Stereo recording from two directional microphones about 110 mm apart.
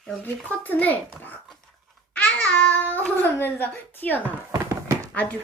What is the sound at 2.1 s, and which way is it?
Babbling, 15° left (ahead or behind).